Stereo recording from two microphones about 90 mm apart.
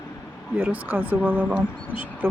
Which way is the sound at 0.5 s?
20° right (ahead or behind).